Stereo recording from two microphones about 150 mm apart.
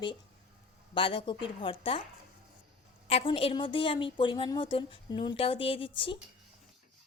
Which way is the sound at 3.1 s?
40° left (ahead or behind).